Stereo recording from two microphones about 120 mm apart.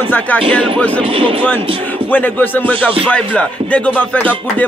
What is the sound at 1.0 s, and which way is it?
Speech, 50° right (ahead or behind).